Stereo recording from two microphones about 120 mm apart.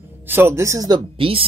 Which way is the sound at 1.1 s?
50° right (ahead or behind).